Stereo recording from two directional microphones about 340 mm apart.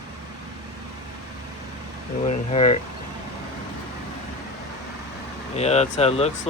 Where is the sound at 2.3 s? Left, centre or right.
Centre.